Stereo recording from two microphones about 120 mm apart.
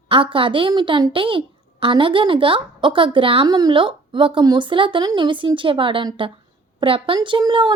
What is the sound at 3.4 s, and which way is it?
A woman's voice, 35° right (ahead or behind).